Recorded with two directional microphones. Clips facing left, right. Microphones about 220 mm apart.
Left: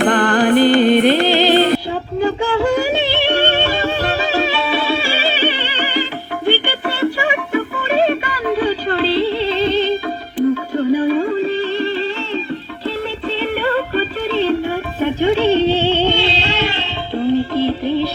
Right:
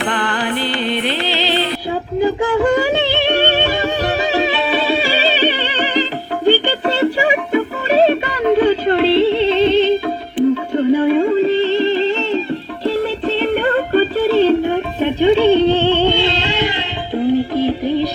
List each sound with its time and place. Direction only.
0.0 s music: 45° left (ahead or behind)
2.2 s music: 20° right (ahead or behind)
7.9 s music: 40° right (ahead or behind)
8.4 s yodeling: 25° right (ahead or behind)
10.7 s music: 25° right (ahead or behind)
12.9 s music: 40° right (ahead or behind)
15.0 s music: 15° right (ahead or behind)